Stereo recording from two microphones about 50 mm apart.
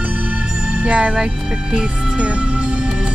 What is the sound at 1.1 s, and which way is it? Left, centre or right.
Speech, centre.